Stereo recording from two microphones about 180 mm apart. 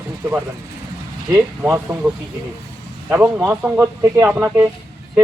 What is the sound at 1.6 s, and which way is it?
Speech, 10° right (ahead or behind).